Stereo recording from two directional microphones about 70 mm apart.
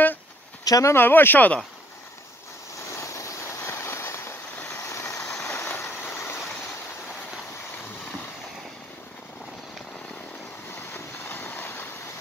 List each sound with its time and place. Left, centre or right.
0.7 s speech: left
0.9 s speech: left
3.0 s vehicle: left
10.7 s vehicle: left